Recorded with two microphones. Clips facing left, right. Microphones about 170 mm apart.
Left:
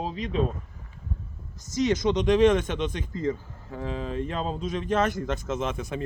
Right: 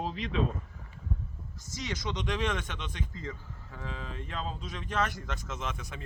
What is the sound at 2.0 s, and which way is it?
Speech, 60° left (ahead or behind).